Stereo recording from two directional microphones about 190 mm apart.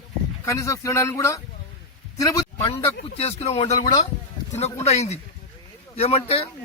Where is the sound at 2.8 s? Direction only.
30° left (ahead or behind).